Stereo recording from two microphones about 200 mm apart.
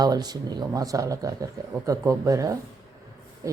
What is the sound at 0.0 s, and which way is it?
Speech, 20° right (ahead or behind).